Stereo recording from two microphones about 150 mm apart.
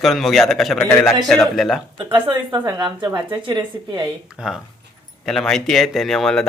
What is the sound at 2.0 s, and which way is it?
A woman's voice, 30° right (ahead or behind).